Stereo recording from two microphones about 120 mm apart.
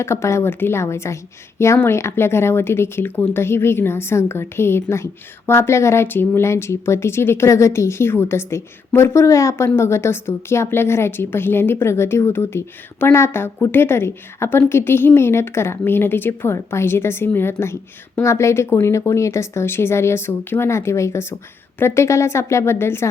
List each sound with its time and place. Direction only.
0.0 s speech: 25° left (ahead or behind)